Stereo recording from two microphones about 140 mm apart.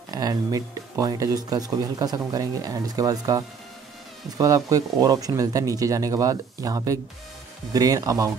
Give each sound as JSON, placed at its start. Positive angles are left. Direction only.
{"t": 0.1, "sound": "speech", "side_deg": -25}